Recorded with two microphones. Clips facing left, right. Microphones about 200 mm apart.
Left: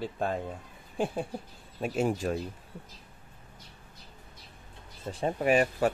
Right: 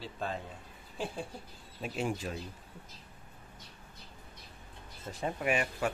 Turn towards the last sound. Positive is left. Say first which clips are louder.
# left 7 dB
turn(degrees=35)  # may be behind; listen again after turning